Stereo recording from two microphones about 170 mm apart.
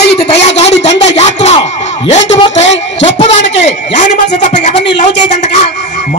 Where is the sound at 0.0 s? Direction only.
75° left (ahead or behind).